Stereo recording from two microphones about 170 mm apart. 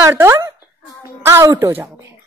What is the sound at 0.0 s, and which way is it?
A woman's voice, 15° right (ahead or behind).